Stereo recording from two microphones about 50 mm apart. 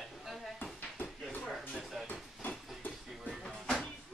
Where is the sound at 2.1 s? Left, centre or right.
Left.